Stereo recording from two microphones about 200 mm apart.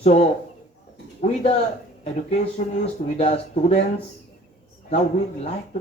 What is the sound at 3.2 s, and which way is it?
Speech, 30° left (ahead or behind).